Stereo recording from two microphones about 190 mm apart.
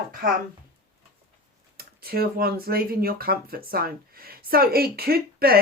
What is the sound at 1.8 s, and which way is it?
Speech, 50° right (ahead or behind).